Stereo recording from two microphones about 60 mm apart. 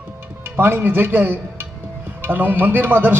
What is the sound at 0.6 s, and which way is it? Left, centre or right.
A man's voice, right.